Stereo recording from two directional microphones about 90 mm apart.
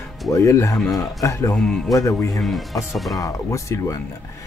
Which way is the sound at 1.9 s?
35° left (ahead or behind).